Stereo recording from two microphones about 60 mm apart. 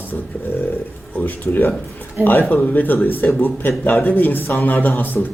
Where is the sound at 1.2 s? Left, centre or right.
Left.